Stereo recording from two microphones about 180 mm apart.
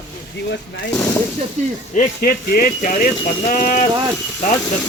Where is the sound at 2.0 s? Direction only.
55° left (ahead or behind).